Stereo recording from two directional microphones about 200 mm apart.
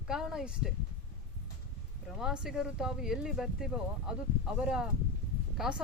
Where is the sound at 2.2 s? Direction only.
5° right (ahead or behind).